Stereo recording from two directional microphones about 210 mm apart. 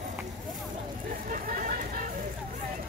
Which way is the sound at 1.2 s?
40° right (ahead or behind).